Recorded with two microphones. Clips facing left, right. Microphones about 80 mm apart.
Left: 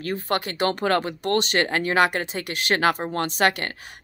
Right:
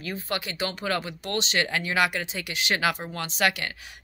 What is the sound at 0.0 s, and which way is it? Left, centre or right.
Speech, left.